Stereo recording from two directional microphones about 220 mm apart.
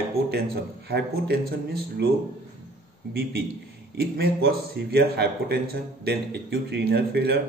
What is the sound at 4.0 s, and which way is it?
A man's voice, 45° right (ahead or behind).